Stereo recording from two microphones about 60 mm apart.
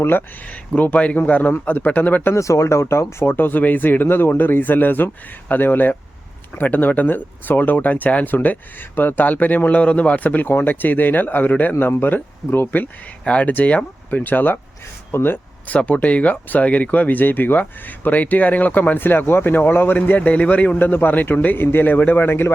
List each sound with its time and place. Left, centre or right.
0.0 s speech: left
2.3 s speech: left
3.3 s speech: left
13.2 s speech: left
15.1 s a sound: left
15.7 s speech: left